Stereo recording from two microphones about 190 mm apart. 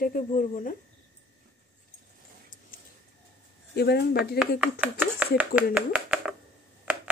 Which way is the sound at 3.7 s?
60° left (ahead or behind).